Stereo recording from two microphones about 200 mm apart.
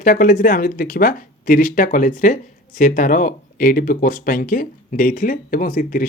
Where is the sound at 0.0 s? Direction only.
45° left (ahead or behind).